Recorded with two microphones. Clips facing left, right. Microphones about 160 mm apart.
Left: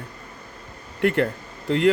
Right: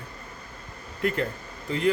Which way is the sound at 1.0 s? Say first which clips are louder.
Left 6 dB; 65° left (ahead or behind).